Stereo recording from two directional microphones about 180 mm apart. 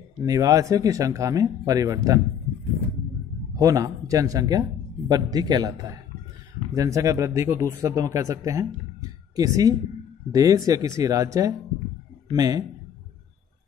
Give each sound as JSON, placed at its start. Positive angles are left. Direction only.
{"t": 0.2, "sound": "speech", "side_deg": -20}
{"t": 3.5, "sound": "speech", "side_deg": -20}